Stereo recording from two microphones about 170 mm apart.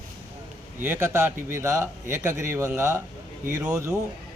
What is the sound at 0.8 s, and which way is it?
A man's voice, 15° right (ahead or behind).